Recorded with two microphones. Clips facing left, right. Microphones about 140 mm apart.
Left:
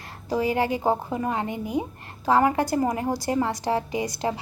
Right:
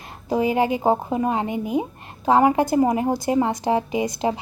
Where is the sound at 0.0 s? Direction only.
20° right (ahead or behind).